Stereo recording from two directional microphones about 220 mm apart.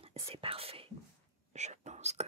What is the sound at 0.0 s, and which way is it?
Speech, 25° right (ahead or behind).